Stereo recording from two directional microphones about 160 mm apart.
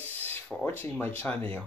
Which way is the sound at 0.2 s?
10° left (ahead or behind).